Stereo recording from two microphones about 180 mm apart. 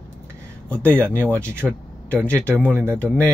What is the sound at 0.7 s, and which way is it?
Speech, 10° left (ahead or behind).